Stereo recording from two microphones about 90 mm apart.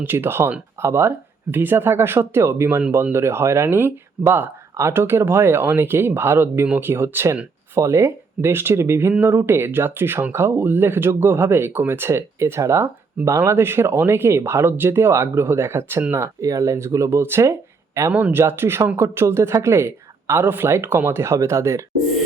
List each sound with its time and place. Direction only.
0.0 s speech: 25° right (ahead or behind)
18.1 s speech: 20° right (ahead or behind)